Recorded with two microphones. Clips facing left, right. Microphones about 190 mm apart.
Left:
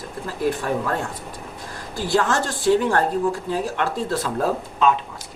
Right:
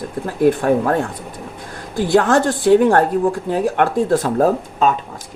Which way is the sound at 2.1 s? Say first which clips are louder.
Right 7 dB; 50° right (ahead or behind).